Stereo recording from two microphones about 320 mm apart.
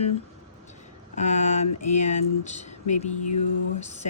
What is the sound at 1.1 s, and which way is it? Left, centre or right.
A woman's voice, left.